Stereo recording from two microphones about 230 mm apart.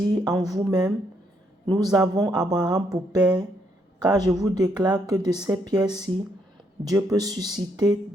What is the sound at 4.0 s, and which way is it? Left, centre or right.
Speech, centre.